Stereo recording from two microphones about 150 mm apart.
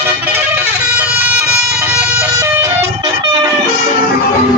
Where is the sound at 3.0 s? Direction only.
30° right (ahead or behind).